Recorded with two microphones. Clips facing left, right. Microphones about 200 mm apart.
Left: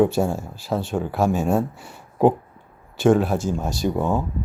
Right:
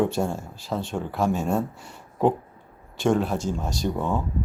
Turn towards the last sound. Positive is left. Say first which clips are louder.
# left 4 dB
turn(degrees=5)  # may be behind; listen again after turning